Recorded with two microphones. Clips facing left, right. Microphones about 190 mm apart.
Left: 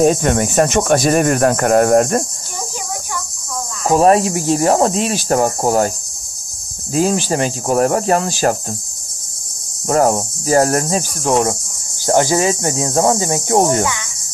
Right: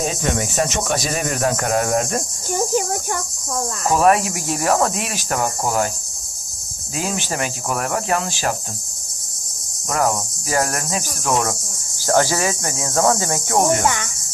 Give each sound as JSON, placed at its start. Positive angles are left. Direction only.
{"t": 0.0, "sound": "speech", "side_deg": 50}
{"t": 2.5, "sound": "cricket", "side_deg": -50}
{"t": 3.8, "sound": "speech", "side_deg": 35}
{"t": 6.9, "sound": "speech", "side_deg": 35}
{"t": 9.8, "sound": "speech", "side_deg": 35}
{"t": 12.0, "sound": "speech", "side_deg": 20}